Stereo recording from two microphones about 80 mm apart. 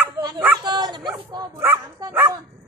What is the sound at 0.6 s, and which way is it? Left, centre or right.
Speech, right.